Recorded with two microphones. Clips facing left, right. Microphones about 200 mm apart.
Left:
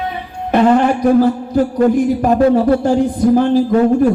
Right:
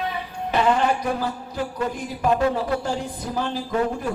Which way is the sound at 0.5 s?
50° left (ahead or behind).